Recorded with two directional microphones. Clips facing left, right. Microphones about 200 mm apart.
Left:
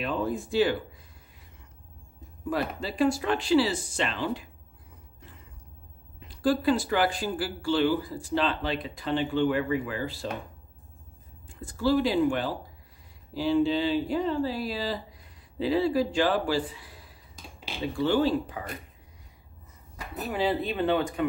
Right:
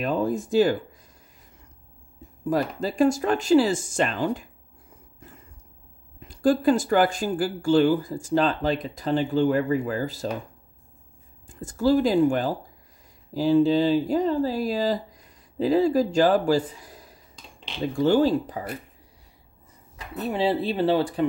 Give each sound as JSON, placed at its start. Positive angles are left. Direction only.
{"t": 0.0, "sound": "speech", "side_deg": -45}
{"t": 2.5, "sound": "speech", "side_deg": -45}
{"t": 6.1, "sound": "speech", "side_deg": -45}
{"t": 11.4, "sound": "speech", "side_deg": -45}
{"t": 20.2, "sound": "speech", "side_deg": -30}